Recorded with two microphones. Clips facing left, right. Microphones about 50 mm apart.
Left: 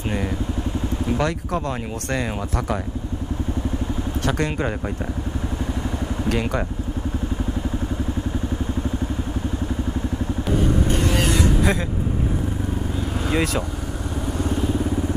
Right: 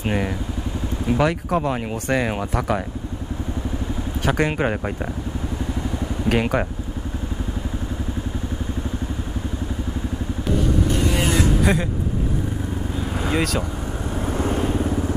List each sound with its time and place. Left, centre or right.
1.0 s speech: centre
4.3 s speech: right
6.3 s speech: right
11.7 s vehicle: centre
13.2 s speech: centre
14.2 s vehicle: right